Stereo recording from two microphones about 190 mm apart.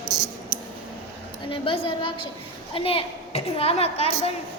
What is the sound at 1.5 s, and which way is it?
Child singing, 30° left (ahead or behind).